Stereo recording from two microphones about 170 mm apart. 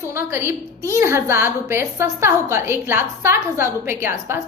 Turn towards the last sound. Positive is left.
turn(degrees=-15)  # may be behind; listen again after turning